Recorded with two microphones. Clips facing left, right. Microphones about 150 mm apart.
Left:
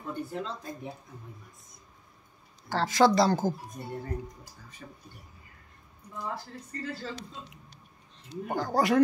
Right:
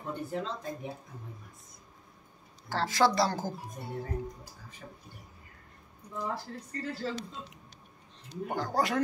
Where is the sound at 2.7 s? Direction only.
20° left (ahead or behind).